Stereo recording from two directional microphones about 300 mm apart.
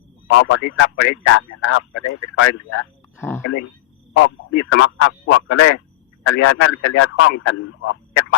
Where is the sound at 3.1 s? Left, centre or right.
Centre.